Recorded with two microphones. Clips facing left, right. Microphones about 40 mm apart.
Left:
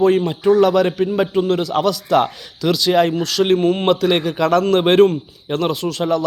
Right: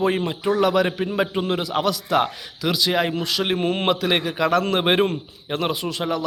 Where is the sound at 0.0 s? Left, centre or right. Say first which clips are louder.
Left 7 dB; centre.